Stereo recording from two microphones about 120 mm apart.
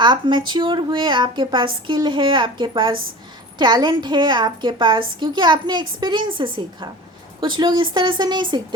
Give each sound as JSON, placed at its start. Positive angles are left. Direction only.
{"t": 0.0, "sound": "a woman's voice", "side_deg": -40}